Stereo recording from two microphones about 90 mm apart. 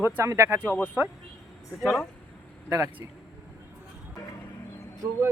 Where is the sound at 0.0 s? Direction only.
30° right (ahead or behind).